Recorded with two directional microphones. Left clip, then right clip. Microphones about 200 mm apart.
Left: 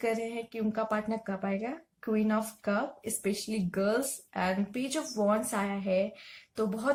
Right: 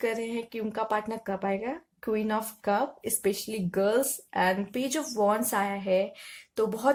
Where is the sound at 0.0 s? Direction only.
40° right (ahead or behind).